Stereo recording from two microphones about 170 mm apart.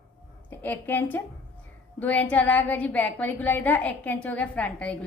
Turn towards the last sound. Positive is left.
turn(degrees=5)  # may be behind; listen again after turning